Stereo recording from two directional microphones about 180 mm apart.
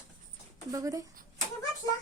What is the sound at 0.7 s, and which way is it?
Speech, 20° right (ahead or behind).